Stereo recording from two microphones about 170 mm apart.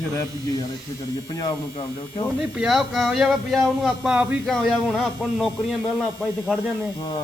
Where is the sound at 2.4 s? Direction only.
Centre (ahead or behind).